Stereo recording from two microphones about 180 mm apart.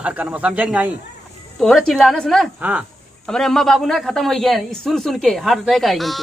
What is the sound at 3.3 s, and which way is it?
A man's voice, 5° left (ahead or behind).